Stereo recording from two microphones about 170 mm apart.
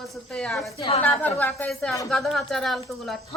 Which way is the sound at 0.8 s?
35° left (ahead or behind).